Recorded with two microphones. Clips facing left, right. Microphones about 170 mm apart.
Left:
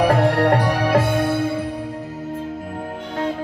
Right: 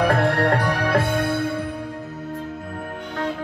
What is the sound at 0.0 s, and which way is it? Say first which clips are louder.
Music: left 3 dB; 15° left (ahead or behind).